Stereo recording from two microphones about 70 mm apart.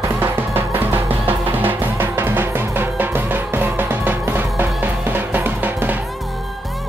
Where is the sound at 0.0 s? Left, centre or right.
Right.